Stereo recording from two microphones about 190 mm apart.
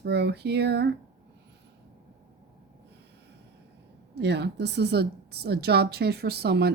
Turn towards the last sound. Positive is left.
turn(degrees=-60)  # may be behind; listen again after turning